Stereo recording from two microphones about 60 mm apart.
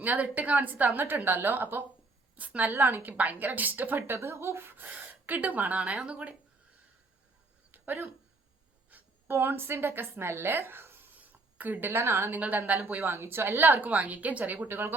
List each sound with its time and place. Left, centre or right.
0.0 s a woman's voice: right
7.7 s a sound: right
8.9 s speech: right
12.4 s a woman's voice: right